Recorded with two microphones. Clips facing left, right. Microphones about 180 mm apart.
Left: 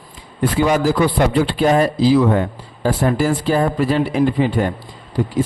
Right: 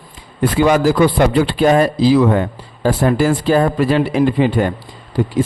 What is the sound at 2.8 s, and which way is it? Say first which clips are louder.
A man's voice: right 3 dB; 85° right.